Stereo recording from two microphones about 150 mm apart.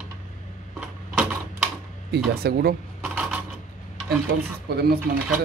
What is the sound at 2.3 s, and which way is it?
Speech, 90° right.